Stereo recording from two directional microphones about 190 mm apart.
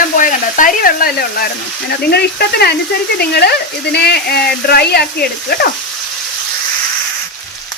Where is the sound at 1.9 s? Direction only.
60° left (ahead or behind).